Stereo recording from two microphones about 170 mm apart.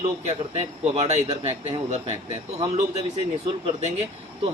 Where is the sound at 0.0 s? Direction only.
35° right (ahead or behind).